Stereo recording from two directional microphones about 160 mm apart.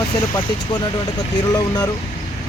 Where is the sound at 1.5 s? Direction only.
25° left (ahead or behind).